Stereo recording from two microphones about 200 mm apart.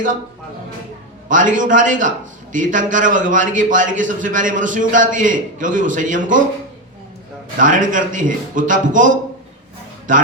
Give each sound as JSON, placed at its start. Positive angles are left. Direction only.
{"t": 1.3, "sound": "a man's voice", "side_deg": -40}
{"t": 7.6, "sound": "a man's voice", "side_deg": -40}